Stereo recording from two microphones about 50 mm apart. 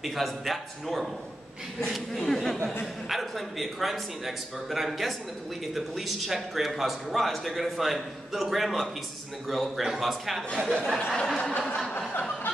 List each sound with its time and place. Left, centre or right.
0.0 s a man's voice: centre
2.1 s snicker: centre
3.1 s a man's voice: centre
11.3 s snicker: centre